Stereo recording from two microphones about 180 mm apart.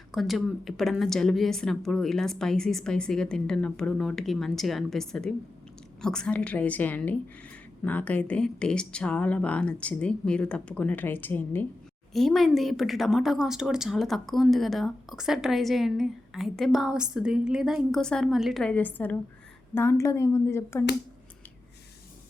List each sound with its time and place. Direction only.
0.1 s a woman's voice: centre (ahead or behind)